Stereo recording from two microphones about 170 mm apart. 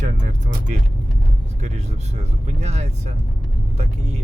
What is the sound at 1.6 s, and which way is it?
Speech, 40° right (ahead or behind).